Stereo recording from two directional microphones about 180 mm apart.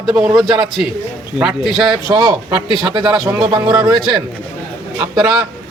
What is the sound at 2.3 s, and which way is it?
Speech, 15° right (ahead or behind).